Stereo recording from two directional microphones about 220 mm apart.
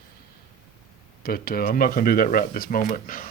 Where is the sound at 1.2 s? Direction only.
40° left (ahead or behind).